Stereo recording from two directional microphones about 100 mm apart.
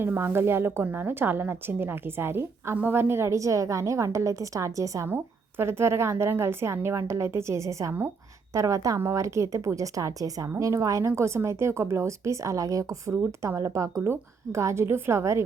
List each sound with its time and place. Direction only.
0.0 s a woman's voice: 20° right (ahead or behind)
5.0 s a woman's voice: 20° right (ahead or behind)